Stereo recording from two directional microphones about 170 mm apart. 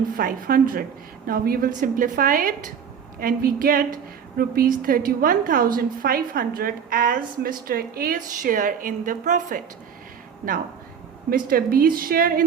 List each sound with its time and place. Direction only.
0.2 s a woman's voice: 55° right (ahead or behind)
11.3 s a woman's voice: 60° right (ahead or behind)